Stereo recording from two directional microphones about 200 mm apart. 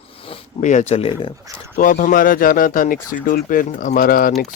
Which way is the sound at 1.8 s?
40° left (ahead or behind).